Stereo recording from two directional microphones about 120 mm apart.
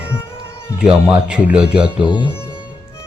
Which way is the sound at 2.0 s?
45° left (ahead or behind).